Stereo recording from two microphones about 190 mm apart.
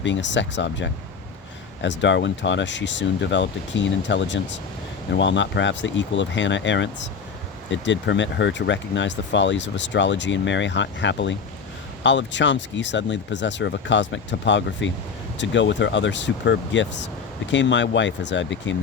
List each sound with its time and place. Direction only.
0.0 s speech: 70° left (ahead or behind)